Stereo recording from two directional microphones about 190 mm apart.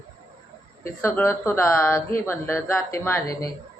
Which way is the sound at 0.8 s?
15° left (ahead or behind).